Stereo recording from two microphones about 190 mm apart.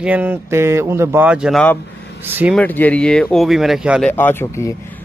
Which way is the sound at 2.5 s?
10° left (ahead or behind).